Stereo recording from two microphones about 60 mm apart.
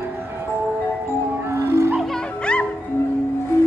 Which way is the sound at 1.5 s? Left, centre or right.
Right.